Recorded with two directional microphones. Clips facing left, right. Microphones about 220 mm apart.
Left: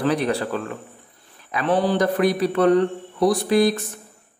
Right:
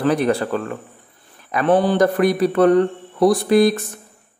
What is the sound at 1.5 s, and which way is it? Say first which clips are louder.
Speech: right 4 dB; 50° right (ahead or behind).